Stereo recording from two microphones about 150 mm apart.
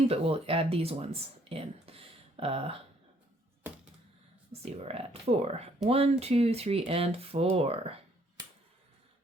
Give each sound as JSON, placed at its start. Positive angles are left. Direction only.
{"t": 0.1, "sound": "speech", "side_deg": -40}
{"t": 4.6, "sound": "speech", "side_deg": -45}